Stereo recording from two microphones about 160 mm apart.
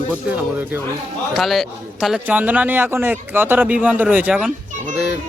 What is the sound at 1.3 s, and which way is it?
A man's voice, centre (ahead or behind).